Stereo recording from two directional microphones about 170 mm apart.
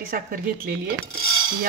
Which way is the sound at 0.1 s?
60° right (ahead or behind).